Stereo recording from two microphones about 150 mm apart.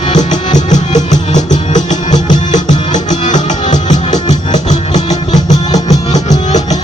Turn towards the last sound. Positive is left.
turn(degrees=50)  # may be behind; listen again after turning